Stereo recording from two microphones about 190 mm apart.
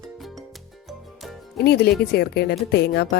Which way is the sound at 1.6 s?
55° left (ahead or behind).